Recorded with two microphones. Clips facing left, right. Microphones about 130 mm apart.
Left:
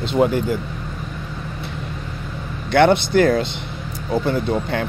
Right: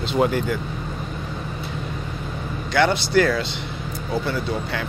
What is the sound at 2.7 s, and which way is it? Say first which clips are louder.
Speech: left 4 dB; 55° left (ahead or behind).